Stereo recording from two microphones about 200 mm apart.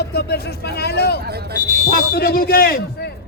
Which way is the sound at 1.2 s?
55° right (ahead or behind).